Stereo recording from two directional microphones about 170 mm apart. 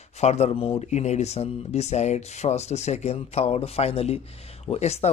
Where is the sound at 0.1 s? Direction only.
40° left (ahead or behind).